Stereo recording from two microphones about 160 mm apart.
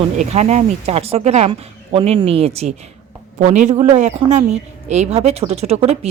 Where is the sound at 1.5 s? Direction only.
35° right (ahead or behind).